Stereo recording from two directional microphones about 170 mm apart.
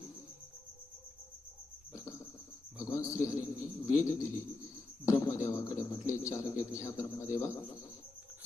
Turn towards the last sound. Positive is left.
turn(degrees=15)  # may be behind; listen again after turning